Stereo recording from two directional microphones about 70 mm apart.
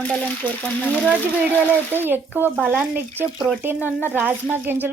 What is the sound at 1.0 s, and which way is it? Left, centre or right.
Speech, right.